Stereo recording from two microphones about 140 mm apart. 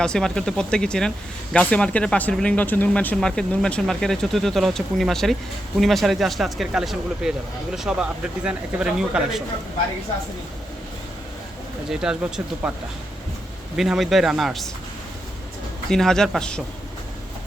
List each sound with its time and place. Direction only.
0.0 s speech: 5° left (ahead or behind)
11.9 s speech: 5° right (ahead or behind)
13.7 s speech: 5° right (ahead or behind)
15.9 s speech: 5° left (ahead or behind)